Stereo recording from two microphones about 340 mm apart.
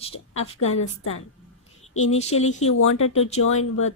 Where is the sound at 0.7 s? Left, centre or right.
Left.